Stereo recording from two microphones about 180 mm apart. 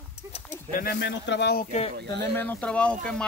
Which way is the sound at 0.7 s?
55° left (ahead or behind).